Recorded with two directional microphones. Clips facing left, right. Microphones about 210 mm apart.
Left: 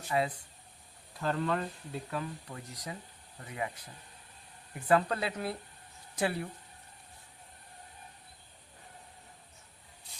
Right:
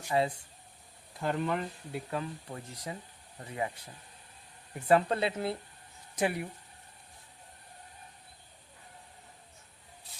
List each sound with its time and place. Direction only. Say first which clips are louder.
0.1 s speech: right 2 dB; 30° right (ahead or behind)
1.2 s speech: even; 15° right (ahead or behind)
4.9 s speech: right 2 dB; 25° right (ahead or behind)